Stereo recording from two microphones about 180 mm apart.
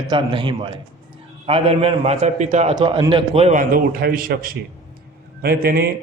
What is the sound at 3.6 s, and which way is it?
A man's voice, 50° right (ahead or behind).